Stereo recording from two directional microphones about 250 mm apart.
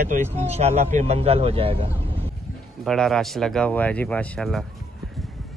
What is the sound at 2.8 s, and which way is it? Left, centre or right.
Speech, centre.